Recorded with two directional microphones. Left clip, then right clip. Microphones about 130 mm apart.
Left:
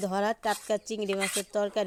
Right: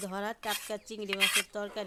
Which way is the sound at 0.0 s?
30° left (ahead or behind).